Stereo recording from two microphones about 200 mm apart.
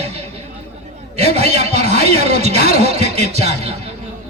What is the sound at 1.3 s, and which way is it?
A man's voice, 30° right (ahead or behind).